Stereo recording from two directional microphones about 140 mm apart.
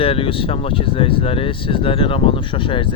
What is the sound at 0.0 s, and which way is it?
Speech, 40° left (ahead or behind).